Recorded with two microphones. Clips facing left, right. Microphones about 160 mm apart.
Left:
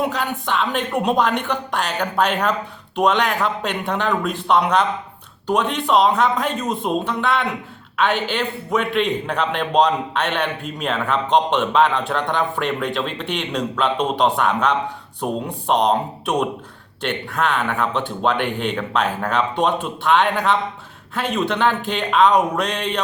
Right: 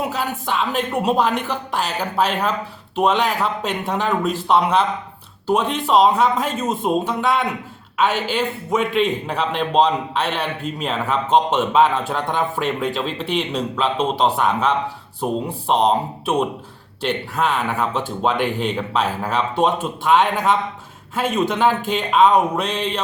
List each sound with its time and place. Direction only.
0.1 s a man's voice: 5° right (ahead or behind)
6.0 s a man's voice: 5° right (ahead or behind)